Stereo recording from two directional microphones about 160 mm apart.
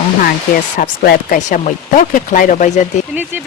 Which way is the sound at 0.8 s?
55° left (ahead or behind).